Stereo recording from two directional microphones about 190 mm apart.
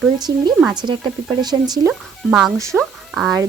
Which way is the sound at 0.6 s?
Centre (ahead or behind).